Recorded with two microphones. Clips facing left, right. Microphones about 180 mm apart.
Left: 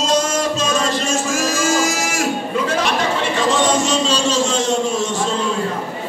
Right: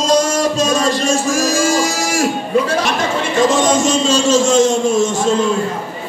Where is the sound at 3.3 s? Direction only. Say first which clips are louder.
Right 5 dB; 45° right (ahead or behind).